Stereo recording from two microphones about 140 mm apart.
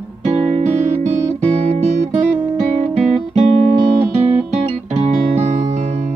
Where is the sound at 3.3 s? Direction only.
50° right (ahead or behind).